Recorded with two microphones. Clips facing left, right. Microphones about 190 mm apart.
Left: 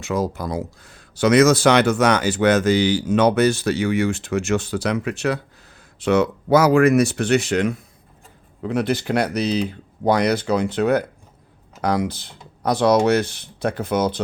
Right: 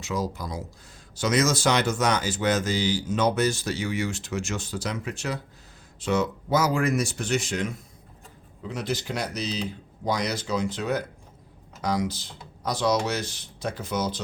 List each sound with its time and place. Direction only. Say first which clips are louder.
0.0 s speech: left 6 dB; 55° left (ahead or behind)